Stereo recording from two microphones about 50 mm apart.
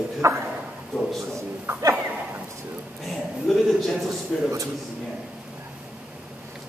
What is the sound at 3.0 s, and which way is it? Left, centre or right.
A man's voice, centre.